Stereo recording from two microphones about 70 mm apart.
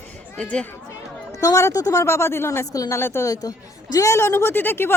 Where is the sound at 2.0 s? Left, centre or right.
Left.